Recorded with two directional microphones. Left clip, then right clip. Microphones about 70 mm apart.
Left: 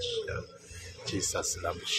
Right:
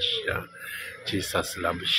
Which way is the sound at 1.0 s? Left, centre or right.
Right.